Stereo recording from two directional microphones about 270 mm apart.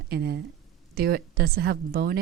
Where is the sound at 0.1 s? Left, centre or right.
Right.